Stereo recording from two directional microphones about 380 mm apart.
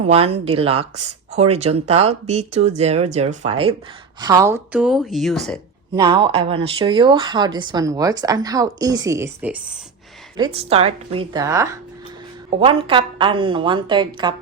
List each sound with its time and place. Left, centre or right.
0.1 s speech: centre
5.9 s speech: centre